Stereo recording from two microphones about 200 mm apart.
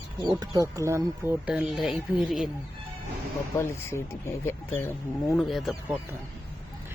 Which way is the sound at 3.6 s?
10° left (ahead or behind).